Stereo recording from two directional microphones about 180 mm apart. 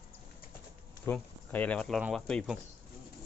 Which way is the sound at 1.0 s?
10° left (ahead or behind).